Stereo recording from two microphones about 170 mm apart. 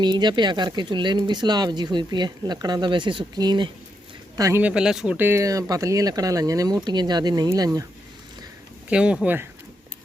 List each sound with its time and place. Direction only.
0.0 s speech: 25° right (ahead or behind)
4.6 s speech: 5° right (ahead or behind); by 7.9 s 20° right (ahead or behind)
8.9 s speech: 5° right (ahead or behind)